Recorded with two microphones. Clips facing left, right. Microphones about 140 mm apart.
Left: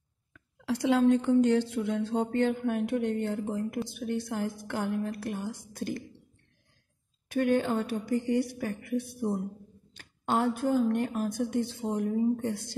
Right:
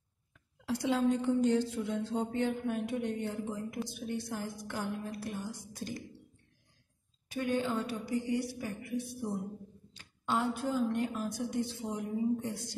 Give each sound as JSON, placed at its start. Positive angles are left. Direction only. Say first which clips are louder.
{"t": 0.3, "sound": "a woman's voice", "louder": "left 4 dB", "side_deg": 75}
{"t": 7.2, "sound": "a woman's voice", "louder": "left 6 dB", "side_deg": 60}